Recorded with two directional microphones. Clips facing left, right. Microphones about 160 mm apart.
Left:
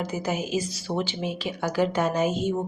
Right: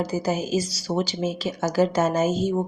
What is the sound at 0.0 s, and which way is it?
Speech, 40° right (ahead or behind).